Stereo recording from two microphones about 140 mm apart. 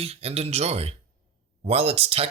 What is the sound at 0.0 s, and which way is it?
Speech, 45° right (ahead or behind).